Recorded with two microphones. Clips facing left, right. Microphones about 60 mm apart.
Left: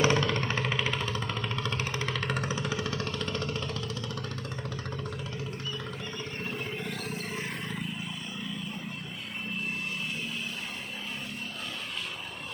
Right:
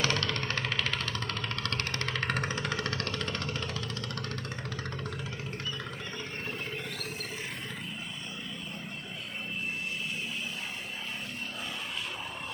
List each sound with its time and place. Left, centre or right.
0.0 s music: centre
2.3 s vehicle: right
2.6 s vehicle: centre
3.2 s music: centre